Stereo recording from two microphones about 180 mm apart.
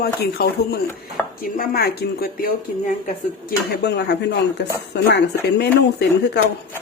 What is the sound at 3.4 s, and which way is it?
Speech, 65° left (ahead or behind).